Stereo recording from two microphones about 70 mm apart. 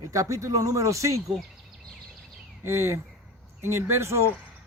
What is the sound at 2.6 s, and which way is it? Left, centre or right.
Speech, right.